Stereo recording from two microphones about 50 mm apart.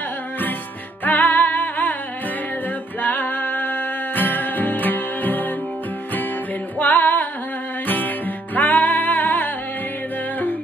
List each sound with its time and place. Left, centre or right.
1.0 s music: left
3.0 s music: left
6.8 s music: left